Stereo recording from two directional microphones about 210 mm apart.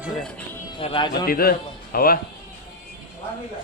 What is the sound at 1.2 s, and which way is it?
Speech, 45° left (ahead or behind).